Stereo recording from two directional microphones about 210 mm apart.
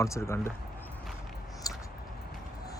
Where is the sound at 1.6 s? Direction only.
15° left (ahead or behind).